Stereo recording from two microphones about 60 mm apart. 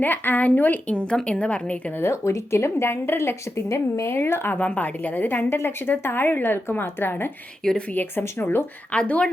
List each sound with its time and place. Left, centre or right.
0.0 s speech: left
0.9 s a woman's voice: centre
2.0 s speech: left
4.5 s a woman's voice: left
8.2 s speech: left
8.9 s a woman's voice: left